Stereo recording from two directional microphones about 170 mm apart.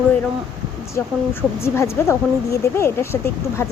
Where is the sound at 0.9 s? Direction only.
15° left (ahead or behind).